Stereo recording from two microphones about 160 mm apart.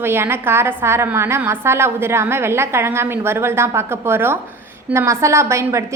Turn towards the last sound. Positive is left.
turn(degrees=-15)  # may be behind; listen again after turning